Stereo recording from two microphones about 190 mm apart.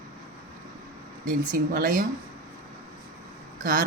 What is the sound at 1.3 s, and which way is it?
Speech, 45° right (ahead or behind).